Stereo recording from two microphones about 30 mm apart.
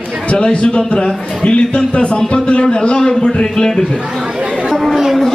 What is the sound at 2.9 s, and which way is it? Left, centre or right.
Speech, left.